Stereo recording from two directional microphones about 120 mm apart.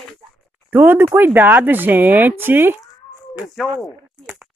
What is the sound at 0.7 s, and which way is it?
Speech, 15° right (ahead or behind).